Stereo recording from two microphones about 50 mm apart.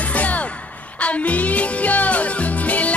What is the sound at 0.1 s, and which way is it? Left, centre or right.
Music, left.